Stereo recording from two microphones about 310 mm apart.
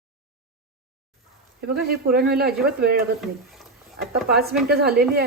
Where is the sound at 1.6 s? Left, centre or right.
Right.